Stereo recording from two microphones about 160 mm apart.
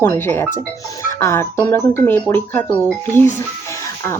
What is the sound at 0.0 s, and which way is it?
Speech, 15° left (ahead or behind).